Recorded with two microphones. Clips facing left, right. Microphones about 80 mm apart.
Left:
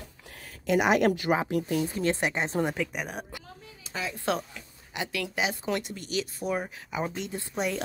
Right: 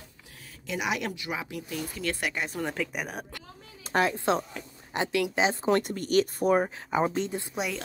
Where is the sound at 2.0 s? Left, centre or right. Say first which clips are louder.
Left 4 dB; left.